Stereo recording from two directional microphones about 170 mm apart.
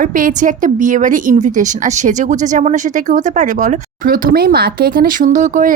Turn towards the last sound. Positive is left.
turn(degrees=-45)  # may be behind; listen again after turning